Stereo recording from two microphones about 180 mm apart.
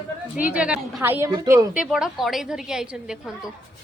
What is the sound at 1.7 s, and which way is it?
A woman's voice, 5° right (ahead or behind).